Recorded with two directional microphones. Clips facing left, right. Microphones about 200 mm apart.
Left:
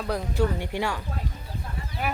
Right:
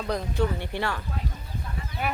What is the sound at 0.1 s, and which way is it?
Speech, 10° left (ahead or behind).